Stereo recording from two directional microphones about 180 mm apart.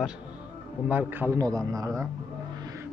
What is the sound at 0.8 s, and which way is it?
A man's voice, 10° right (ahead or behind).